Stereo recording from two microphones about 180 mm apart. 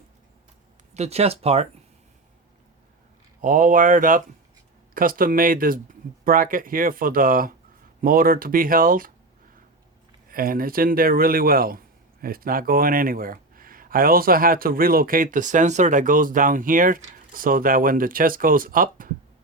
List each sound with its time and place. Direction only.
0.9 s speech: 35° right (ahead or behind)
3.4 s speech: 45° right (ahead or behind)
10.2 s speech: 55° right (ahead or behind)